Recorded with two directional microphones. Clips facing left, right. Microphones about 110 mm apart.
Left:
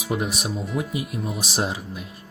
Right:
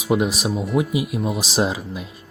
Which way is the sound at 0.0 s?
90° right.